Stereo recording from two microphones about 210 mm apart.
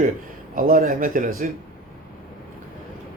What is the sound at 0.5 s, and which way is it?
Speech, 40° right (ahead or behind).